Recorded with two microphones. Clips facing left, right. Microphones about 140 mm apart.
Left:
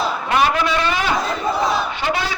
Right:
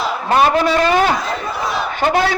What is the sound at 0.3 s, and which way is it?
Speech, 35° right (ahead or behind).